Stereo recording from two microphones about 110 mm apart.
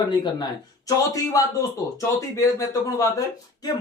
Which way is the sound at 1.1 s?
30° left (ahead or behind).